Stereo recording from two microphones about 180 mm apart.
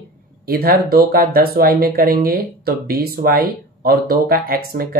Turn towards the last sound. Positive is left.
turn(degrees=-55)  # may be behind; listen again after turning